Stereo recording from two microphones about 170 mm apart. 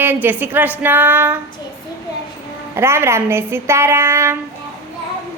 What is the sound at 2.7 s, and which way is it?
Speech, 15° right (ahead or behind).